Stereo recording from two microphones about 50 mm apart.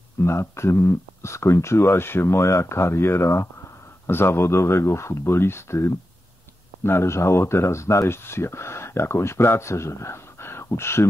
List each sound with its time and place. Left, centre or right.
0.2 s speech: left